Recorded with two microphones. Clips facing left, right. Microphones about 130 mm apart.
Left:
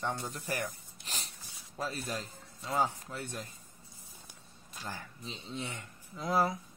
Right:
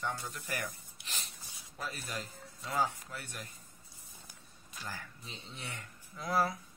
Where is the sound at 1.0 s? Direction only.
40° left (ahead or behind).